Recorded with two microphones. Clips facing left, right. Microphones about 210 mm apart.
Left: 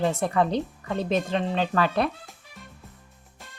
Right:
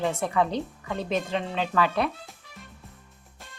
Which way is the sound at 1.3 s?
40° left (ahead or behind).